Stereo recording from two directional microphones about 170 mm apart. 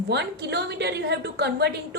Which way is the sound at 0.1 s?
80° right.